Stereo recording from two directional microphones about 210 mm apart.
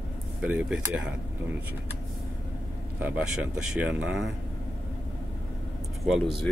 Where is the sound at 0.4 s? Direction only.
5° right (ahead or behind).